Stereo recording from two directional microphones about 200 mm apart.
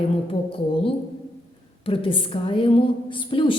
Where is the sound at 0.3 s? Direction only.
25° left (ahead or behind).